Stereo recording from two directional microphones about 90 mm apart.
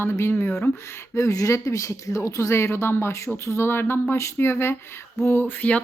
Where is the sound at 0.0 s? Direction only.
25° left (ahead or behind).